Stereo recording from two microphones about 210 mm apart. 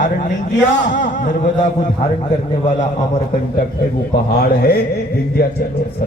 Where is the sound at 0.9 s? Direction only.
35° left (ahead or behind).